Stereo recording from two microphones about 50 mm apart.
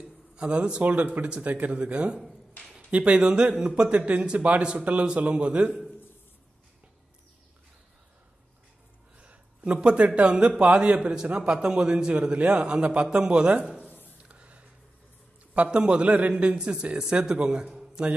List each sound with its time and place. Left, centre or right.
0.4 s a man's voice: right
9.2 s a man's voice: right
14.3 s a sound: right
15.5 s a man's voice: right